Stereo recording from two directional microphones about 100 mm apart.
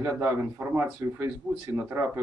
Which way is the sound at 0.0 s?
20° right (ahead or behind).